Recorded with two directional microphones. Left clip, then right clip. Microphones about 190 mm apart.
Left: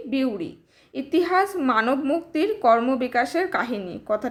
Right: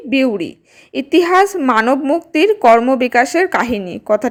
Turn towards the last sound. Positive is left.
turn(degrees=-40)  # may be behind; listen again after turning